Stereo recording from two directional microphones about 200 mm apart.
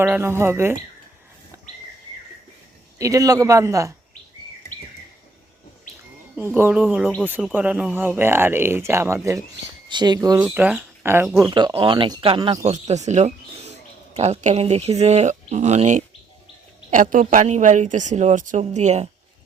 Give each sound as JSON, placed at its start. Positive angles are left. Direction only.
{"t": 0.0, "sound": "speech", "side_deg": -10}
{"t": 3.0, "sound": "speech", "side_deg": -15}
{"t": 6.3, "sound": "speech", "side_deg": -10}
{"t": 10.3, "sound": "speech", "side_deg": -5}
{"t": 11.5, "sound": "speech", "side_deg": -25}
{"t": 12.7, "sound": "speech", "side_deg": -35}